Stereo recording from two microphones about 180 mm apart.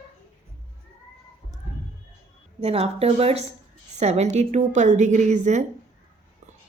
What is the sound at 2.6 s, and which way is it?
A woman's voice, 35° right (ahead or behind).